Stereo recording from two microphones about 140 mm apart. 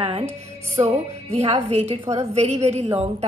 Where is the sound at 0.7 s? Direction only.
45° right (ahead or behind).